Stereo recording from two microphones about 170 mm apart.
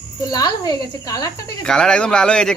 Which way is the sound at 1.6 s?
5° left (ahead or behind).